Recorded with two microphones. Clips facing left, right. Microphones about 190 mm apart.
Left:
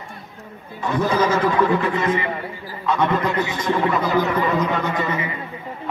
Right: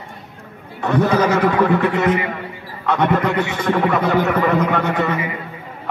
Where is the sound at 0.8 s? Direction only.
65° right (ahead or behind).